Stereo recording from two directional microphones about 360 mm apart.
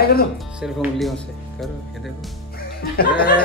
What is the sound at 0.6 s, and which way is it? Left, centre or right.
Speech, centre.